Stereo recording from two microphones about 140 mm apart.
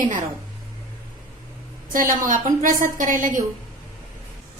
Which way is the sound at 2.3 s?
70° right (ahead or behind).